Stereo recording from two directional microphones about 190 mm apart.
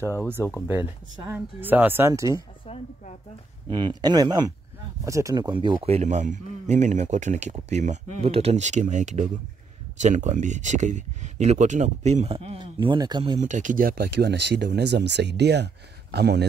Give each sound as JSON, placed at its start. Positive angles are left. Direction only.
{"t": 0.3, "sound": "speech", "side_deg": -10}
{"t": 2.6, "sound": "speech", "side_deg": 30}
{"t": 3.7, "sound": "speech", "side_deg": -25}
{"t": 13.4, "sound": "speech", "side_deg": -40}